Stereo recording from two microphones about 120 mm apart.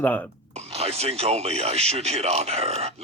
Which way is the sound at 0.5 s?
60° right (ahead or behind).